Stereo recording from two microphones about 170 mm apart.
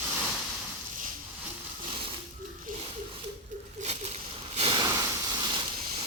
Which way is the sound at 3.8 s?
40° right (ahead or behind).